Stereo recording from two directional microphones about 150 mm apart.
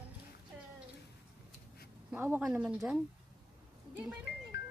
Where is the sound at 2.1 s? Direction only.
10° right (ahead or behind).